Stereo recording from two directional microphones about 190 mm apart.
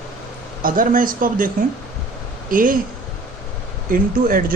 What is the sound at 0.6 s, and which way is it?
Speech, 45° right (ahead or behind).